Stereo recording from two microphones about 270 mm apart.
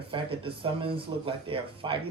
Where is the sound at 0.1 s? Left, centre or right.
Centre.